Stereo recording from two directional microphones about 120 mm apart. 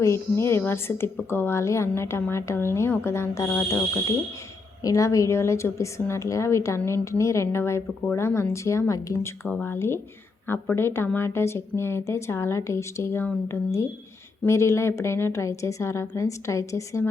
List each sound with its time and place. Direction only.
0.0 s a woman's voice: 25° left (ahead or behind)
4.8 s a woman's voice: 30° left (ahead or behind)
9.5 s a woman's voice: 10° left (ahead or behind)